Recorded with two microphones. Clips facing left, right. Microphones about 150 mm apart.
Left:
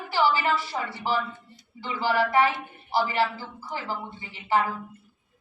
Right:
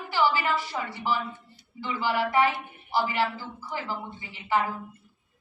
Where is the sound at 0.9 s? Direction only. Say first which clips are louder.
Left 3 dB; 15° right (ahead or behind).